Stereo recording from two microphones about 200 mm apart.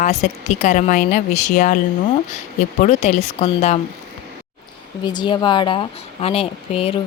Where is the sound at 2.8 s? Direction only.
35° left (ahead or behind).